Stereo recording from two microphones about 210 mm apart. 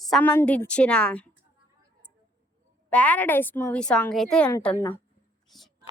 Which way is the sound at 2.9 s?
5° left (ahead or behind).